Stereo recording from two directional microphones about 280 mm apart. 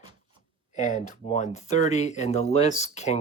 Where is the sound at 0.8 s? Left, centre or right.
Left.